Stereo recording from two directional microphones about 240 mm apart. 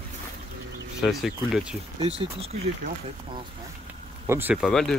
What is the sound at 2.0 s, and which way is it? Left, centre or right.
Speech, right.